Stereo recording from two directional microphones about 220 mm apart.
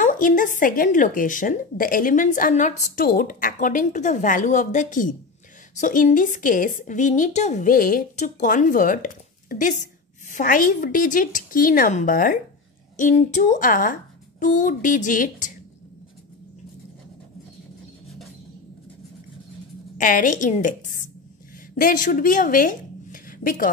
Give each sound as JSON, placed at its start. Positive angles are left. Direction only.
{"t": 0.0, "sound": "a woman's voice", "side_deg": 35}
{"t": 20.0, "sound": "a woman's voice", "side_deg": 35}
{"t": 21.7, "sound": "a woman's voice", "side_deg": 40}